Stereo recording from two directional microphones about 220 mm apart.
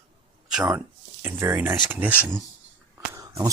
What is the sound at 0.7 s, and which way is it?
Speech, 10° right (ahead or behind).